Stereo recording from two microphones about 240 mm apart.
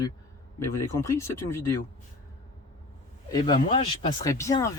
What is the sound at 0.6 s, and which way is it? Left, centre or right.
Speech, centre.